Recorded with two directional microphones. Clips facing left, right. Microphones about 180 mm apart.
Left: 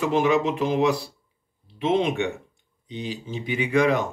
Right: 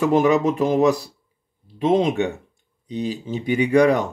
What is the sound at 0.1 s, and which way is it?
Speech, 45° right (ahead or behind).